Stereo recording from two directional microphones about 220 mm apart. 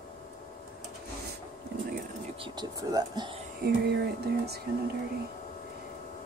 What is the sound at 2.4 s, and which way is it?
Speech, 20° right (ahead or behind).